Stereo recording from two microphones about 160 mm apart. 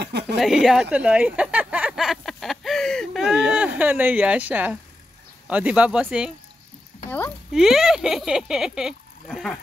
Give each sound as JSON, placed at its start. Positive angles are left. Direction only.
{"t": 0.0, "sound": "speech", "side_deg": -90}
{"t": 0.4, "sound": "speech", "side_deg": 0}
{"t": 7.1, "sound": "speech", "side_deg": 15}
{"t": 7.5, "sound": "speech", "side_deg": -5}